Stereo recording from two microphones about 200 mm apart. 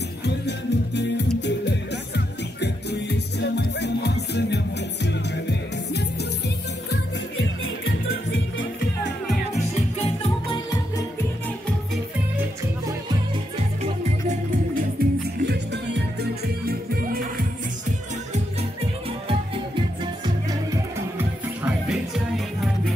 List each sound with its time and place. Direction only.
0.2 s music: 60° left (ahead or behind)
7.8 s music: 70° left (ahead or behind)
15.0 s music: 55° right (ahead or behind)
19.2 s music: 25° right (ahead or behind)
20.2 s music: 15° right (ahead or behind)